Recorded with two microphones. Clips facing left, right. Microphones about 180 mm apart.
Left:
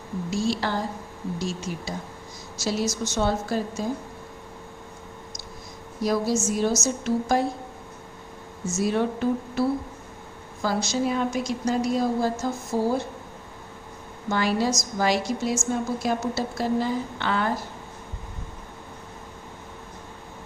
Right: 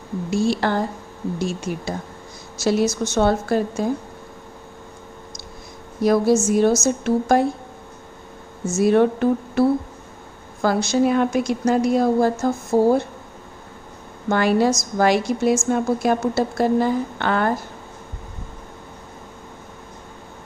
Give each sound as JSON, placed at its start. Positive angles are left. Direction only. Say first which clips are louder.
{"t": 0.3, "sound": "a woman's voice", "louder": "right 6 dB", "side_deg": -60}
{"t": 6.0, "sound": "a woman's voice", "louder": "right 7 dB", "side_deg": -60}
{"t": 8.8, "sound": "a woman's voice", "louder": "right 8 dB", "side_deg": -60}
{"t": 14.3, "sound": "a woman's voice", "louder": "right 6 dB", "side_deg": -55}